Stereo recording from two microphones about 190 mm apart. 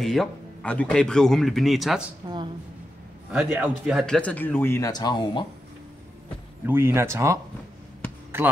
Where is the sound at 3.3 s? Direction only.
10° right (ahead or behind); by 5.5 s 25° left (ahead or behind).